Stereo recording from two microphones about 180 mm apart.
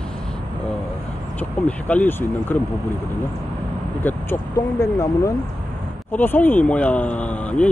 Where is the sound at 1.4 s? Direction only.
10° left (ahead or behind).